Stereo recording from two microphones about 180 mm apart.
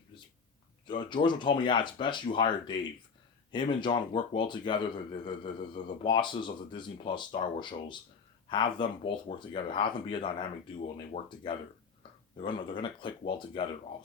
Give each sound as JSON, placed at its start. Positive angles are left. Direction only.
{"t": 0.9, "sound": "speech", "side_deg": 25}